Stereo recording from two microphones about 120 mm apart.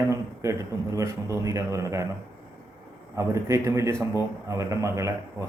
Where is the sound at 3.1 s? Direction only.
25° right (ahead or behind).